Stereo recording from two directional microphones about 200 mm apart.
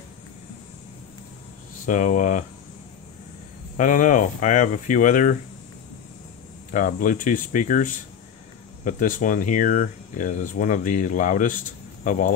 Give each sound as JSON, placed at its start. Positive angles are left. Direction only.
{"t": 1.9, "sound": "speech", "side_deg": 40}
{"t": 3.7, "sound": "speech", "side_deg": 40}
{"t": 6.7, "sound": "speech", "side_deg": 40}